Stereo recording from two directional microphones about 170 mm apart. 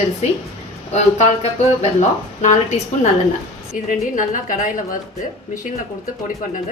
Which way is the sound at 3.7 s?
50° left (ahead or behind).